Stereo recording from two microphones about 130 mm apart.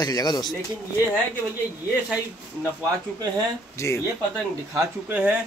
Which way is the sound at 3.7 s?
20° left (ahead or behind).